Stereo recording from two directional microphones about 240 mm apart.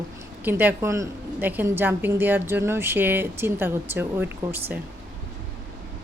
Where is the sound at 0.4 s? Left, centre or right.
Centre.